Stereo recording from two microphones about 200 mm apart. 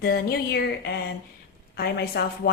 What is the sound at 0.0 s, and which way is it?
A woman's voice, 50° left (ahead or behind).